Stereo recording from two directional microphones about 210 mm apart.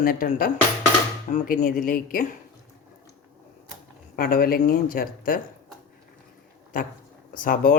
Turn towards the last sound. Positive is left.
turn(degrees=40)  # may be behind; listen again after turning